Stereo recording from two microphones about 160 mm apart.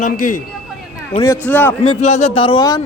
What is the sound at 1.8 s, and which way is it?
Speech, 40° left (ahead or behind).